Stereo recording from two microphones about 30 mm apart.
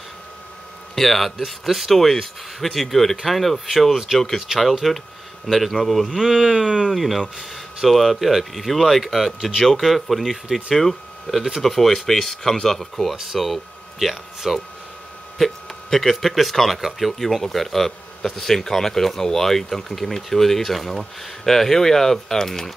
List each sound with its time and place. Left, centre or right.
0.9 s speech: centre
3.9 s speech: centre
6.3 s speech: centre
6.8 s speech: centre
15.3 s speech: centre